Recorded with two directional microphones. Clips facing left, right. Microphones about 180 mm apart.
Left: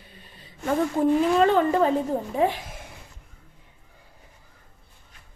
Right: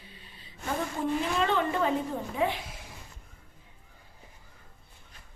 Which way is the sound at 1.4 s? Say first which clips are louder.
Left 7 dB; 40° left (ahead or behind).